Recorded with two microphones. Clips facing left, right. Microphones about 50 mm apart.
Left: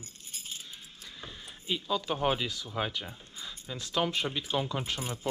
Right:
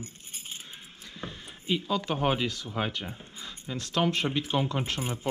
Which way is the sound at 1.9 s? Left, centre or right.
Right.